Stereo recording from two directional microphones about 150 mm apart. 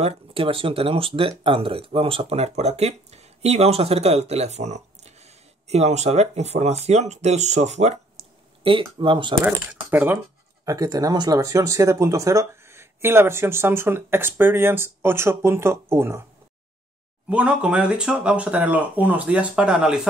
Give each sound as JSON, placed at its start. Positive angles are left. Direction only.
{"t": 0.0, "sound": "speech", "side_deg": -40}
{"t": 8.9, "sound": "speech", "side_deg": -35}
{"t": 9.4, "sound": "speech", "side_deg": -10}
{"t": 17.3, "sound": "speech", "side_deg": -5}